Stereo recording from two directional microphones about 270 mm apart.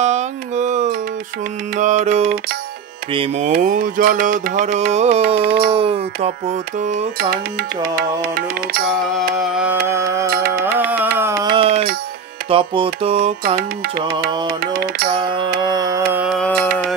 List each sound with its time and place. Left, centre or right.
0.0 s music: right
5.7 s music: right
9.4 s carnatic music: centre
10.3 s music: right
10.6 s carnatic music: centre
11.1 s a sound: centre
11.5 s music: right
13.6 s music: right
15.6 s carnatic music: centre
16.3 s music: centre